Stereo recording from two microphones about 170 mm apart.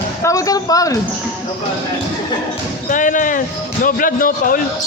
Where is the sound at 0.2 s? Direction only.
20° left (ahead or behind).